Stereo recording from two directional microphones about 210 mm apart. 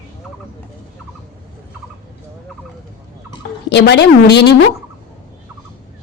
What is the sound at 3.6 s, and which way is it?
Speech, 55° left (ahead or behind).